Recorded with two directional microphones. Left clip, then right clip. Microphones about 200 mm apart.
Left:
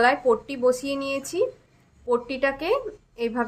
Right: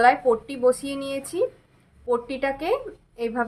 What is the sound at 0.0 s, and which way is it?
A woman's voice, 20° left (ahead or behind).